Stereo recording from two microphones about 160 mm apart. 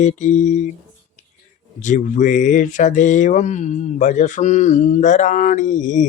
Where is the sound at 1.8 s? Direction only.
55° left (ahead or behind).